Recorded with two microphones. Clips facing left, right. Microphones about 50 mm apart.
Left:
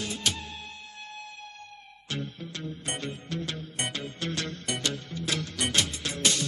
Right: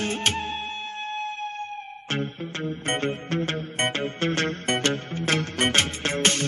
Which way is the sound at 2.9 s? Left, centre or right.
Right.